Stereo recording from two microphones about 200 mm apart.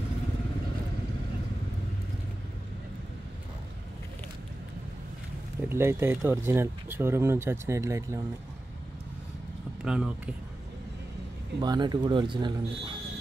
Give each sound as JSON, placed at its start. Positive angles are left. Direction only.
{"t": 5.7, "sound": "speech", "side_deg": -10}
{"t": 9.8, "sound": "speech", "side_deg": -5}
{"t": 11.6, "sound": "speech", "side_deg": -20}